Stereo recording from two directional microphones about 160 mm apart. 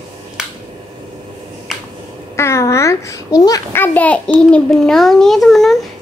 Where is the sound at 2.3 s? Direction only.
15° left (ahead or behind).